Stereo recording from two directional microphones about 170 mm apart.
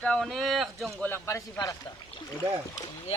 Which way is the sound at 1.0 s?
15° left (ahead or behind).